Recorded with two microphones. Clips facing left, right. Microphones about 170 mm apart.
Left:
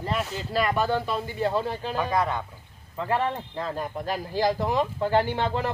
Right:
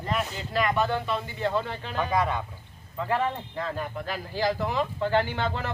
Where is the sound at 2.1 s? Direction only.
10° right (ahead or behind).